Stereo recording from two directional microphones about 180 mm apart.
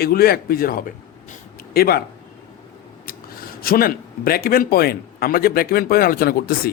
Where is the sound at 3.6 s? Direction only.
55° left (ahead or behind).